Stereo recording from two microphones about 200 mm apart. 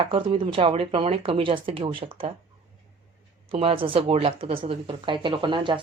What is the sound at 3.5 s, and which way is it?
Speech, 25° right (ahead or behind).